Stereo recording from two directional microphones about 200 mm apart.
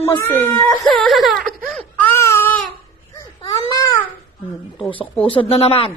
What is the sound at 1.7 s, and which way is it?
Baby cry, 5° left (ahead or behind).